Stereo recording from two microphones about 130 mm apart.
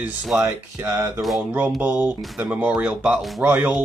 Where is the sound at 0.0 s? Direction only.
5° right (ahead or behind).